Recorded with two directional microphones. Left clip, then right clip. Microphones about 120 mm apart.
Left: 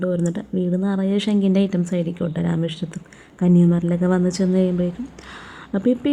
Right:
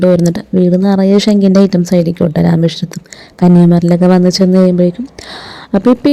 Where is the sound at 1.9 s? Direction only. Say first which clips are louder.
Right 13 dB; 55° right (ahead or behind).